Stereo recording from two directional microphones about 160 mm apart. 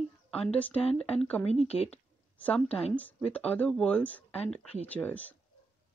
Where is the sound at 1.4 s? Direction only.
40° left (ahead or behind).